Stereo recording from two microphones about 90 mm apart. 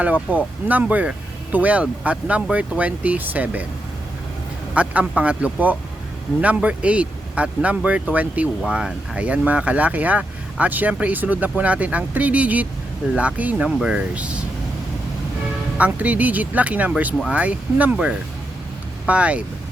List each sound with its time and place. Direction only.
0.0 s speech: 20° right (ahead or behind)
4.7 s speech: 15° right (ahead or behind)
15.8 s speech: 15° right (ahead or behind)
19.0 s speech: 15° right (ahead or behind)